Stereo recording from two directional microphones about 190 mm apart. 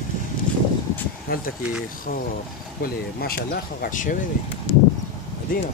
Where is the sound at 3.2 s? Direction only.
50° left (ahead or behind).